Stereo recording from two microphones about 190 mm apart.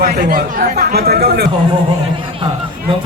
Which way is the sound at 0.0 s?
50° right (ahead or behind).